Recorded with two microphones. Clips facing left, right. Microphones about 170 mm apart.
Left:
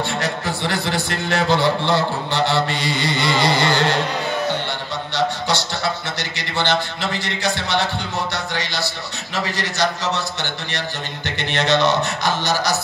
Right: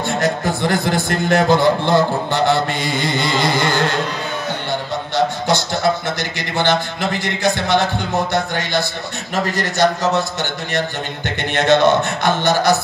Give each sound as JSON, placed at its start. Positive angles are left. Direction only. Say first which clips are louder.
{"t": 0.2, "sound": "a man's voice", "louder": "right 5 dB", "side_deg": -50}
{"t": 6.5, "sound": "a man's voice", "louder": "right 3 dB", "side_deg": -50}